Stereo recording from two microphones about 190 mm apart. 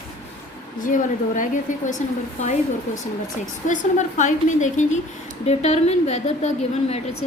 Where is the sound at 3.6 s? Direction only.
40° left (ahead or behind).